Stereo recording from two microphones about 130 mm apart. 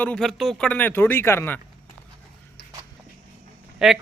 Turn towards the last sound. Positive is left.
turn(degrees=-5)  # may be behind; listen again after turning